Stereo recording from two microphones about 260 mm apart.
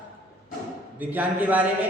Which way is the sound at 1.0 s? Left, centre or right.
Centre.